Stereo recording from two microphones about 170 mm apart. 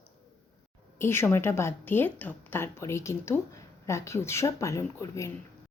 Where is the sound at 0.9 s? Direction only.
15° left (ahead or behind).